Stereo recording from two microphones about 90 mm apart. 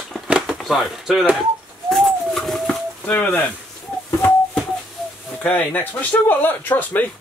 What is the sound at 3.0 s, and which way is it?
Speech, 20° left (ahead or behind).